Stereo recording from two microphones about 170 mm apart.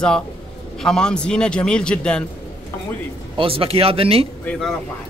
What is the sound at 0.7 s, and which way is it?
Speech, 5° left (ahead or behind).